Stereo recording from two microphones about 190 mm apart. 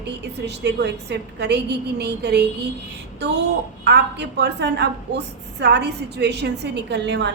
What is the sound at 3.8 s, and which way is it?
A woman's voice, 60° right (ahead or behind).